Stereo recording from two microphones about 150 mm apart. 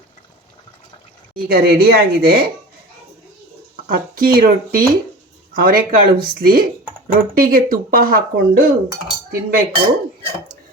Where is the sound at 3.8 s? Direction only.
70° right (ahead or behind).